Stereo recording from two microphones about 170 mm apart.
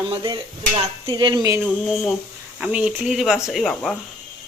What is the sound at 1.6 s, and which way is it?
Speech, centre (ahead or behind).